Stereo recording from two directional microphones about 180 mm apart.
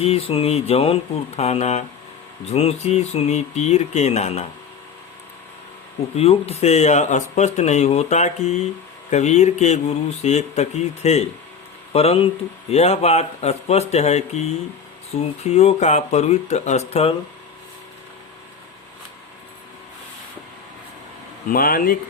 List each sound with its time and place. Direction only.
0.0 s speech: 35° left (ahead or behind)
6.1 s speech: 35° left (ahead or behind)
21.5 s speech: 55° left (ahead or behind)